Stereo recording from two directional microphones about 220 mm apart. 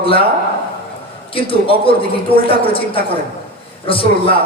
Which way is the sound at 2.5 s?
25° left (ahead or behind).